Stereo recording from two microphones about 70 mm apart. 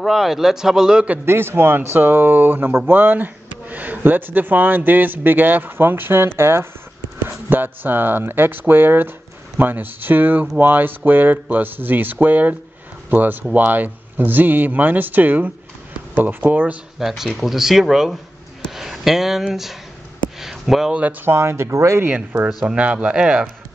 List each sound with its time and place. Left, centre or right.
0.0 s a man's voice: centre
1.2 s speech: right
17.0 s a man's voice: centre
20.3 s a sound: centre
20.9 s speech: right
21.3 s speech: right
22.0 s speech: right
22.5 s speech: centre
22.8 s speech: centre